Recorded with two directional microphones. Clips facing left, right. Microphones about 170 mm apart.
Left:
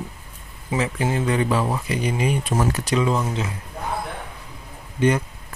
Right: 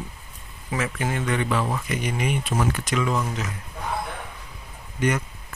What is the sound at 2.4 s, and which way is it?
Speech, 40° left (ahead or behind).